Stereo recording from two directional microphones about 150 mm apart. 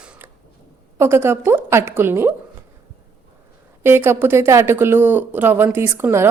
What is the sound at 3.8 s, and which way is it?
Speech, 15° right (ahead or behind).